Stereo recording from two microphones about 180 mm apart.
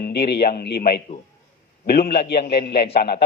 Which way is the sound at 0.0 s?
65° left (ahead or behind).